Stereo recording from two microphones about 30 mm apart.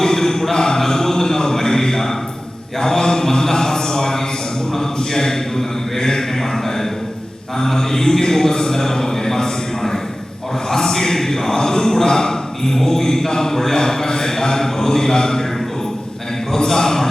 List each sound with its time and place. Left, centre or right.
0.0 s a sound: centre
2.8 s mantra: centre
7.6 s speech: centre
16.6 s speech: centre